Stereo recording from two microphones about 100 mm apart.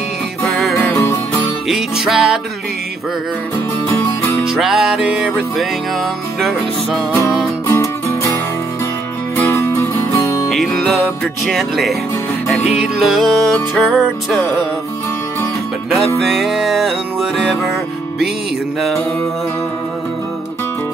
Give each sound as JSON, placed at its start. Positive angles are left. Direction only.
{"t": 0.9, "sound": "music", "side_deg": 25}
{"t": 1.7, "sound": "music", "side_deg": -5}
{"t": 3.9, "sound": "music", "side_deg": 25}
{"t": 4.5, "sound": "music", "side_deg": -5}
{"t": 7.6, "sound": "music", "side_deg": 30}
{"t": 9.4, "sound": "music", "side_deg": 25}
{"t": 10.5, "sound": "music", "side_deg": 0}
{"t": 16.2, "sound": "music", "side_deg": 0}